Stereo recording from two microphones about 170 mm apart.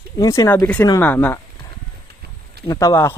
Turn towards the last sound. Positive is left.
turn(degrees=15)  # may be behind; listen again after turning